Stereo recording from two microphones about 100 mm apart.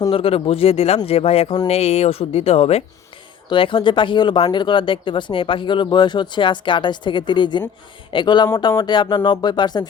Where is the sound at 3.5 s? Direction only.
60° left (ahead or behind).